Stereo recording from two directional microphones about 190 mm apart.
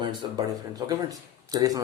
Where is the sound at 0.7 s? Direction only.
20° right (ahead or behind).